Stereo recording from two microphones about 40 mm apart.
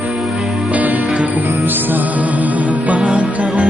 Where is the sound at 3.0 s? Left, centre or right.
Right.